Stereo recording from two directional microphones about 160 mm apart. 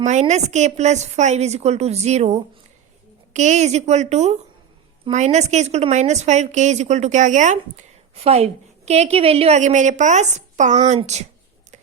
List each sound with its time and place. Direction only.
0.0 s a woman's voice: 45° right (ahead or behind)
8.1 s a woman's voice: 40° right (ahead or behind)